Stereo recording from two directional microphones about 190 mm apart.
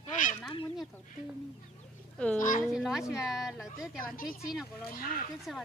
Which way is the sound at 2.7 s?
Centre (ahead or behind).